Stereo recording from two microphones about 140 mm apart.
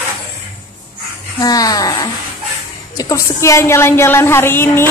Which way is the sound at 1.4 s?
25° left (ahead or behind).